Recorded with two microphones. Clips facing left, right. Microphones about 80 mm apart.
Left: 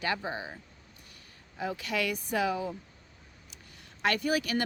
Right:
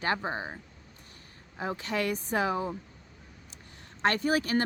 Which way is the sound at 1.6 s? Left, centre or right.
Right.